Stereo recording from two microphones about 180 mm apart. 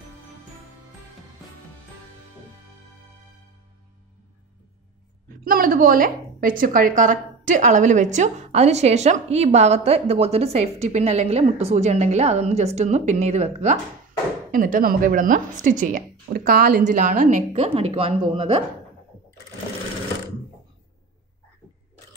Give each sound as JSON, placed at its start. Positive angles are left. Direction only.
{"t": 5.4, "sound": "a woman's voice", "side_deg": -55}
{"t": 14.5, "sound": "a woman's voice", "side_deg": -50}
{"t": 17.5, "sound": "a woman's voice", "side_deg": -35}